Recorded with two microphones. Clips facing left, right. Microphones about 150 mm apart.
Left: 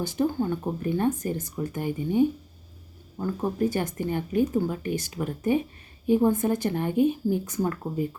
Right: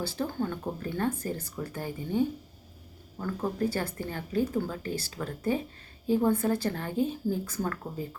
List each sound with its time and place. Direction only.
0.0 s speech: 15° left (ahead or behind)